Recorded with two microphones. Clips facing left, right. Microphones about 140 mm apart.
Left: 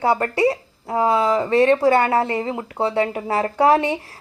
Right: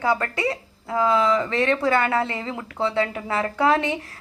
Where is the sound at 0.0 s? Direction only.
30° left (ahead or behind).